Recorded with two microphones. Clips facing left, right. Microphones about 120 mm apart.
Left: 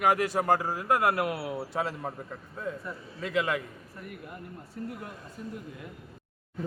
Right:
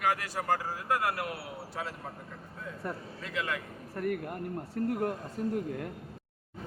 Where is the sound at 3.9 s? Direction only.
55° right (ahead or behind).